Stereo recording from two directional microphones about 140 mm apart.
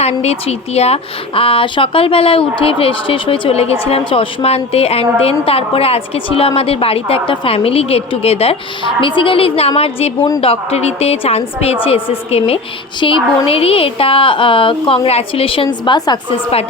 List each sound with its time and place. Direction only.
0.0 s a woman's voice: 50° left (ahead or behind); by 16.1 s 30° left (ahead or behind)